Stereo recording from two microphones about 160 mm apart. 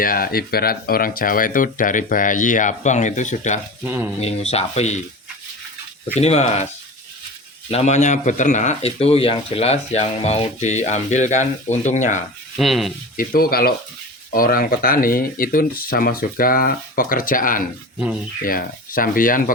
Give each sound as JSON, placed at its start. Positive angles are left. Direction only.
{"t": 0.0, "sound": "speech", "side_deg": 65}
{"t": 3.8, "sound": "speech", "side_deg": -10}
{"t": 4.2, "sound": "speech", "side_deg": 40}
{"t": 6.1, "sound": "speech", "side_deg": 40}
{"t": 7.7, "sound": "speech", "side_deg": 45}
{"t": 12.5, "sound": "speech", "side_deg": 0}
{"t": 13.1, "sound": "speech", "side_deg": 65}
{"t": 17.9, "sound": "speech", "side_deg": -5}
{"t": 18.4, "sound": "speech", "side_deg": 60}